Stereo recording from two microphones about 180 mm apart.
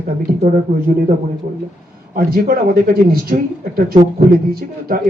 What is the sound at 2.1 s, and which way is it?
A man's voice, 55° right (ahead or behind).